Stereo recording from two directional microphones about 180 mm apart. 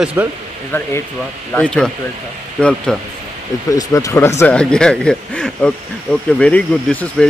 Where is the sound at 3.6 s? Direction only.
20° left (ahead or behind).